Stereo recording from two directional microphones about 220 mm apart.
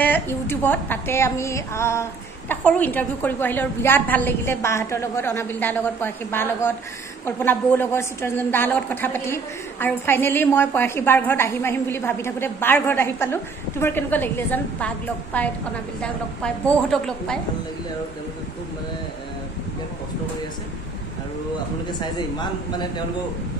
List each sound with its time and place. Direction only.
0.0 s a woman's voice: 10° left (ahead or behind)
16.6 s a woman's voice: 5° left (ahead or behind)